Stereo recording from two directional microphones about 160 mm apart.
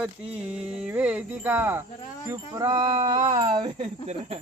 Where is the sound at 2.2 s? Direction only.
20° right (ahead or behind).